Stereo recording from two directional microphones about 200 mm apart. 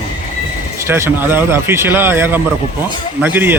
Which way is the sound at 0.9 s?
10° right (ahead or behind).